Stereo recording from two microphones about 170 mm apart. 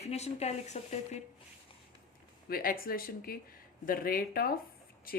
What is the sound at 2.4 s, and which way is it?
Speech, 60° left (ahead or behind).